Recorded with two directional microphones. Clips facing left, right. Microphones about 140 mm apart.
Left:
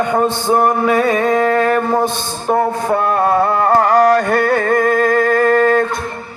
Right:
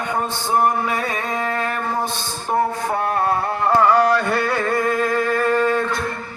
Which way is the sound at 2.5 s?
85° left.